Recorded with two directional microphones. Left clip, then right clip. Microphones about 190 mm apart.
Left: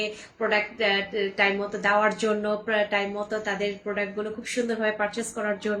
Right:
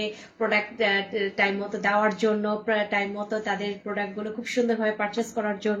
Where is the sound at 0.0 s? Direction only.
15° left (ahead or behind).